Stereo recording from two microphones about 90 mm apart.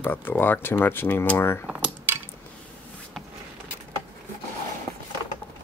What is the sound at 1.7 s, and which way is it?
Cutlery, 15° right (ahead or behind).